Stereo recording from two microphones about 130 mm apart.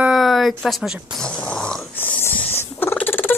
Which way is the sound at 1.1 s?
5° left (ahead or behind).